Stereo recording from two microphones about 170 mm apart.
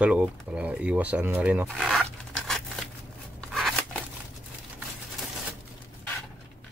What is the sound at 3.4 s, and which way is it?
Scissors, 5° left (ahead or behind).